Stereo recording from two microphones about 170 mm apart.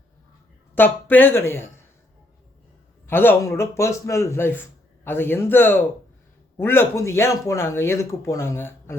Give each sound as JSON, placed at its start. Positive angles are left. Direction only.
{"t": 0.8, "sound": "speech", "side_deg": 10}
{"t": 3.1, "sound": "speech", "side_deg": 10}